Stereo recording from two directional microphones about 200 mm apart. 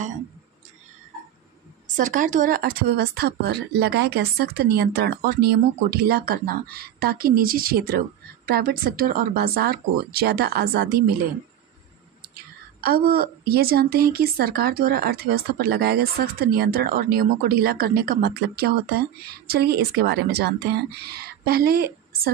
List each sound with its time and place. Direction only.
2.0 s a woman's voice: 40° right (ahead or behind)
12.8 s a woman's voice: 50° right (ahead or behind)